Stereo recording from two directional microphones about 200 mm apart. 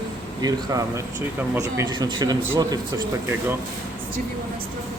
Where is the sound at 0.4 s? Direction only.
15° right (ahead or behind).